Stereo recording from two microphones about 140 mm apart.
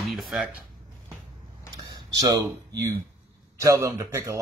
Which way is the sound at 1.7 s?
30° right (ahead or behind).